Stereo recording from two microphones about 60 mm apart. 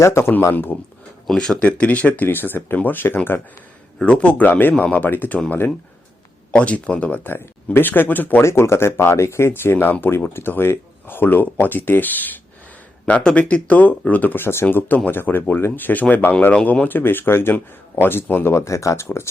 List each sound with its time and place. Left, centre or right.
0.0 s speech: left
0.5 s speech: left
1.3 s speech: centre
1.6 s speech: left
3.9 s speech: centre
6.5 s speech: left
7.3 s speech: left
8.4 s speech: left
9.5 s speech: left